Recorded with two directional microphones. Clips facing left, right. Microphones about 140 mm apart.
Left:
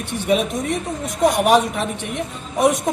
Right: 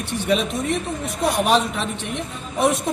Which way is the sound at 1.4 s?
15° left (ahead or behind).